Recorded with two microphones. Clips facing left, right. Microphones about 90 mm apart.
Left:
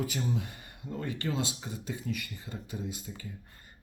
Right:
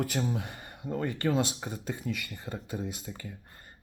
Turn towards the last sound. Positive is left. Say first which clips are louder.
# right 3 dB
turn(degrees=-65)  # may be behind; listen again after turning